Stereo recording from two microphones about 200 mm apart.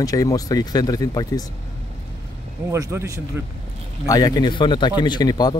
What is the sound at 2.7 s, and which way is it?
Speech, 15° right (ahead or behind).